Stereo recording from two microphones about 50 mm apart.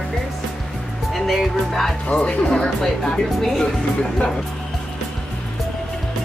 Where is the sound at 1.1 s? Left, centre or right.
Centre.